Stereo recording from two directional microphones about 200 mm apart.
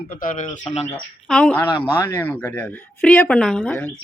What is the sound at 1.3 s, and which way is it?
Speech, 5° left (ahead or behind).